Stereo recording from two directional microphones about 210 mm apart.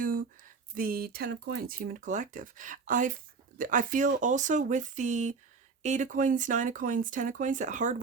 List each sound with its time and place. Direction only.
0.0 s speech: 40° right (ahead or behind)